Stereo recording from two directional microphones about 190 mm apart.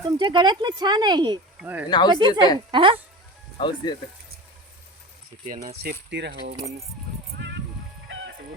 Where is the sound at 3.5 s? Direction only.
25° left (ahead or behind).